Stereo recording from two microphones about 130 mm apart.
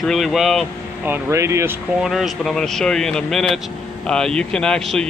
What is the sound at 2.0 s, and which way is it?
Speech, centre (ahead or behind).